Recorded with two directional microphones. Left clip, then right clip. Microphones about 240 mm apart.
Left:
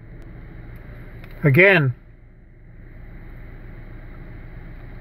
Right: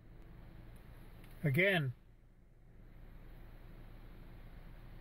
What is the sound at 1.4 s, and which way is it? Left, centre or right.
Speech, centre.